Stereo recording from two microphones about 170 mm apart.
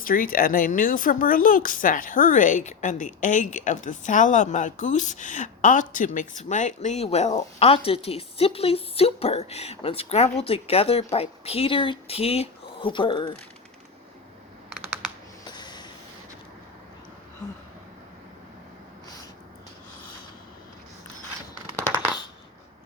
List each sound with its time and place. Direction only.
0.0 s speech: 55° left (ahead or behind); by 13.3 s 30° left (ahead or behind)
14.7 s computer keyboard: 5° right (ahead or behind)
15.4 s snort: 25° left (ahead or behind)